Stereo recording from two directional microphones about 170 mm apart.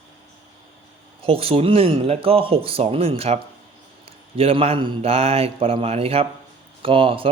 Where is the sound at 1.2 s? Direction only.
35° right (ahead or behind).